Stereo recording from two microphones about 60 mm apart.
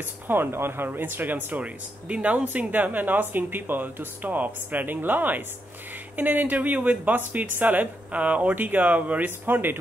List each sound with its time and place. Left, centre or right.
0.0 s speech: right